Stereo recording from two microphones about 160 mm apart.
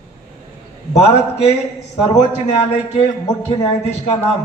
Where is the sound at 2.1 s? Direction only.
40° left (ahead or behind).